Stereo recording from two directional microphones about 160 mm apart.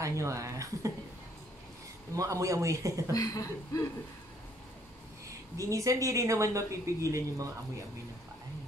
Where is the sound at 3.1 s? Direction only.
20° left (ahead or behind).